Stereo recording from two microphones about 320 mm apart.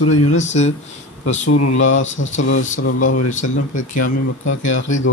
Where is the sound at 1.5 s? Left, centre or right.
Left.